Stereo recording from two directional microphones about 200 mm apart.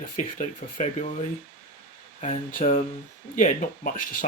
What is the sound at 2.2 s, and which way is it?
Speech, 40° left (ahead or behind).